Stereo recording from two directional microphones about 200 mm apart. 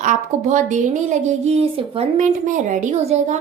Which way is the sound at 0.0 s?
40° right (ahead or behind).